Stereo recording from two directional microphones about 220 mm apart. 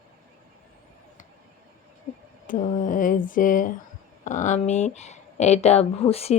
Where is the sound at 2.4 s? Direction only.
35° left (ahead or behind).